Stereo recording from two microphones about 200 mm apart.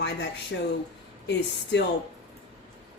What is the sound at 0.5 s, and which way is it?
Speech, 65° left (ahead or behind).